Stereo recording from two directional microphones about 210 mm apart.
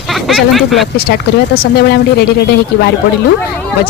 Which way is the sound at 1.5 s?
45° left (ahead or behind).